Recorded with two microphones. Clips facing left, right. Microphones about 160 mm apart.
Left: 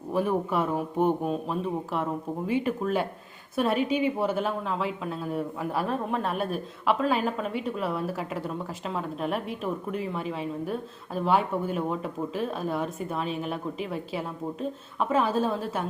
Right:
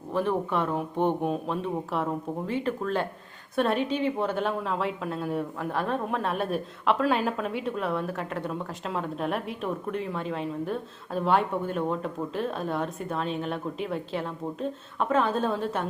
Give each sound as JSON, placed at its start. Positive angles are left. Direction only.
{"t": 0.1, "sound": "a woman's voice", "side_deg": 10}